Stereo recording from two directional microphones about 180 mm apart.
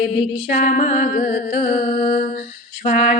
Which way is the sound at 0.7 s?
40° left (ahead or behind).